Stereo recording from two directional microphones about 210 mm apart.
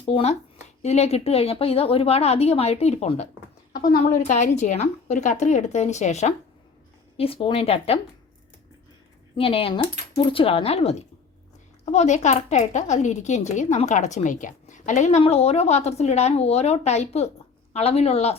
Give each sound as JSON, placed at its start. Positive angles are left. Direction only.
{"t": 0.0, "sound": "a woman's voice", "side_deg": 30}
{"t": 3.7, "sound": "a woman's voice", "side_deg": 45}
{"t": 9.3, "sound": "a woman's voice", "side_deg": 25}